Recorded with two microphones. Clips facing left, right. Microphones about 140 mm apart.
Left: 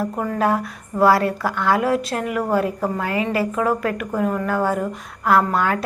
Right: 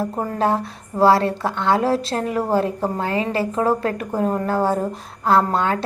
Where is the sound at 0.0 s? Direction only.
30° right (ahead or behind).